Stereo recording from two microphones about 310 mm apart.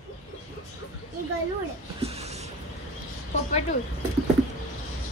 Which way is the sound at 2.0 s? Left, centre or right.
Centre.